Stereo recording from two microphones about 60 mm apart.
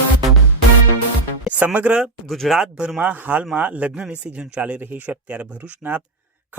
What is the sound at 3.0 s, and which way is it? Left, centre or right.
Speech, right.